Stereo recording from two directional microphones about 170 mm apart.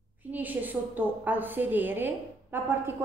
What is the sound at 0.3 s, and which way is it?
A woman's voice, 10° right (ahead or behind).